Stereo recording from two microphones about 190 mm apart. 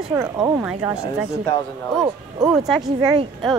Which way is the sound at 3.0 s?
20° right (ahead or behind).